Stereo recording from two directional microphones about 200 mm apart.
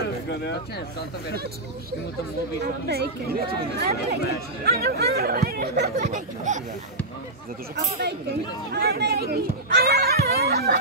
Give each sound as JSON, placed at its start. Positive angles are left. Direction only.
{"t": 2.6, "sound": "speech", "side_deg": -55}
{"t": 8.7, "sound": "speech", "side_deg": -50}